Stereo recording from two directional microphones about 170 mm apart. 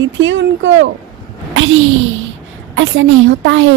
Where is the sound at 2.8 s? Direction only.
90° right.